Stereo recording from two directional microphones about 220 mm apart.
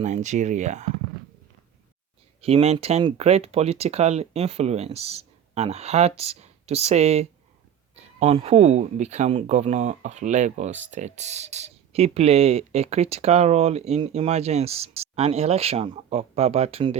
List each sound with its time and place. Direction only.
0.0 s speech: 30° right (ahead or behind)
2.4 s speech: 25° right (ahead or behind)